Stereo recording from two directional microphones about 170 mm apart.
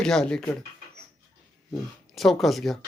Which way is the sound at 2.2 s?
Centre (ahead or behind).